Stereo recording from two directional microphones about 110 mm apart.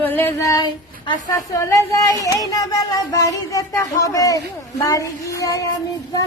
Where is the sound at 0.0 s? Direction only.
15° left (ahead or behind).